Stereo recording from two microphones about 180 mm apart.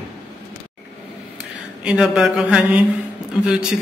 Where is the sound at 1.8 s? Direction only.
5° right (ahead or behind).